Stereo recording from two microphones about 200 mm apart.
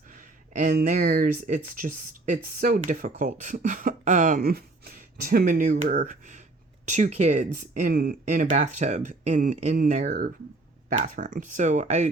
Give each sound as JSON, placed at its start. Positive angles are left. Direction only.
{"t": 0.1, "sound": "speech", "side_deg": -40}